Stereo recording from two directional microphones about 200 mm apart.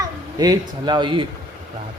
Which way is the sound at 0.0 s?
20° right (ahead or behind).